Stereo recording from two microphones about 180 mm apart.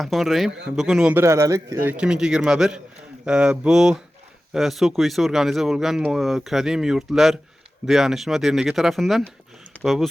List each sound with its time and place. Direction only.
0.0 s speech: centre (ahead or behind)